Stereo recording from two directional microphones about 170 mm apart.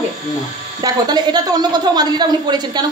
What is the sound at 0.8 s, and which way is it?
A woman's voice, 25° right (ahead or behind).